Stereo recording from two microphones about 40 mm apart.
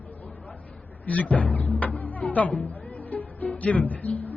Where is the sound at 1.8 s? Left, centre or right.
Left.